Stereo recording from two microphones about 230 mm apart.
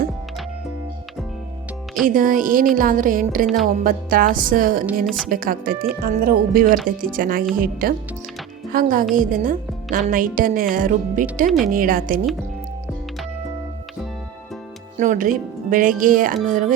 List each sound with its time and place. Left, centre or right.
2.0 s speech: right
5.0 s a woman's voice: centre
5.3 s a woman's voice: right
14.9 s speech: right